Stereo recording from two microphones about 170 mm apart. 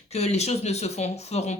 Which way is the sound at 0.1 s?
40° left (ahead or behind).